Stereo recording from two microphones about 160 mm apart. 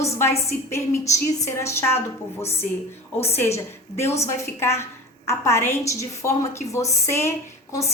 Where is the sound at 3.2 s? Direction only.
15° left (ahead or behind).